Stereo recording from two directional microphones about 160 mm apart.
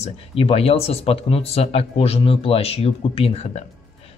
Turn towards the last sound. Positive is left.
turn(degrees=40)  # may be behind; listen again after turning